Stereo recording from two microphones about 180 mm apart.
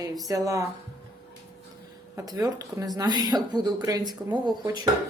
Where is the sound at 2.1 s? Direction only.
20° right (ahead or behind).